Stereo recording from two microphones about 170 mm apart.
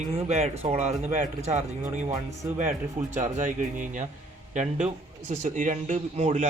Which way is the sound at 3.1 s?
45° right (ahead or behind).